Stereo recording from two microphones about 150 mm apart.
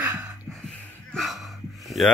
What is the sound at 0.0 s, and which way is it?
Music, 10° right (ahead or behind).